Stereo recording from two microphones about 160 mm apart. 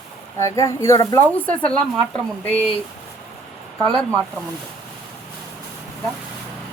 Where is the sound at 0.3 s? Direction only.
20° left (ahead or behind).